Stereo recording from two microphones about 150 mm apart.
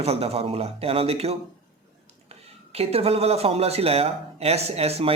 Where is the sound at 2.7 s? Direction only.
40° right (ahead or behind).